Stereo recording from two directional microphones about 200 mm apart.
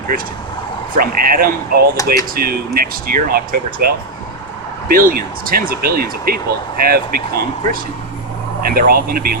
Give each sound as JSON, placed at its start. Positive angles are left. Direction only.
{"t": 0.9, "sound": "speech", "side_deg": -45}
{"t": 2.0, "sound": "speech", "side_deg": 15}
{"t": 2.3, "sound": "speech", "side_deg": -50}